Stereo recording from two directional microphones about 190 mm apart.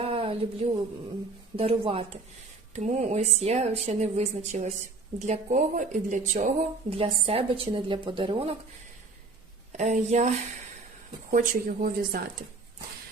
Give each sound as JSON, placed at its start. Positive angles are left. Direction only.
{"t": 0.0, "sound": "a sound", "side_deg": -30}
{"t": 1.5, "sound": "a woman's voice", "side_deg": -30}
{"t": 6.9, "sound": "a woman's voice", "side_deg": -30}
{"t": 9.7, "sound": "a woman's voice", "side_deg": -40}